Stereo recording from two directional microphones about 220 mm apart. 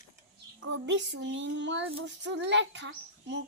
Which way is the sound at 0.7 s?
55° right (ahead or behind).